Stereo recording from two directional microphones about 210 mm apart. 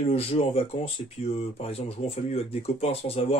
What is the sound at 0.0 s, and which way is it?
Speech, 30° left (ahead or behind).